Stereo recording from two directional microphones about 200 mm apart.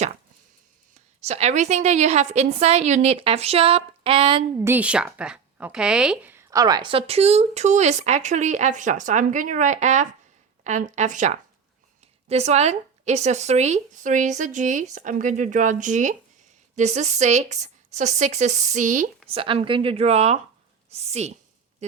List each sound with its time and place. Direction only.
1.2 s speech: 35° right (ahead or behind)
4.6 s speech: 10° right (ahead or behind); by 19.0 s 40° right (ahead or behind)
19.3 s speech: 30° right (ahead or behind)